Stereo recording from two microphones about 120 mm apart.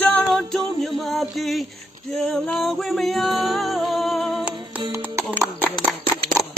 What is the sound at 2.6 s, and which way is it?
Music, centre (ahead or behind).